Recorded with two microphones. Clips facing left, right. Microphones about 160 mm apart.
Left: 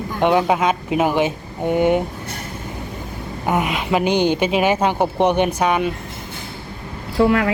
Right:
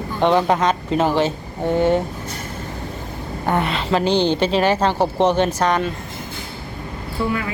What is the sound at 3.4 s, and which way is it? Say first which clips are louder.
A woman's voice: even; 10° left (ahead or behind).